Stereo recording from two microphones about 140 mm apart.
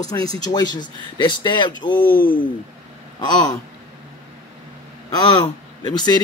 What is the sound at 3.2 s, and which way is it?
Speech, 30° left (ahead or behind).